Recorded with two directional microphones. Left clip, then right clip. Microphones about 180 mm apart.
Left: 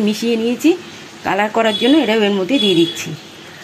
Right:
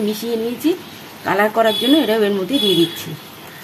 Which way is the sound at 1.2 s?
20° left (ahead or behind).